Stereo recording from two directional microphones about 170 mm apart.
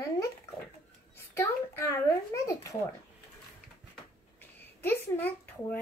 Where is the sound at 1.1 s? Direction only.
15° left (ahead or behind).